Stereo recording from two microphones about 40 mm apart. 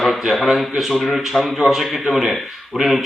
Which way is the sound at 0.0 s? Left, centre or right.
Centre.